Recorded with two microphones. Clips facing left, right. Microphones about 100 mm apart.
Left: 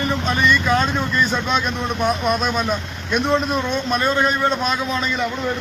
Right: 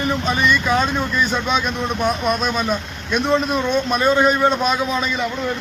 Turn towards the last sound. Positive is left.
turn(degrees=-15)  # may be behind; listen again after turning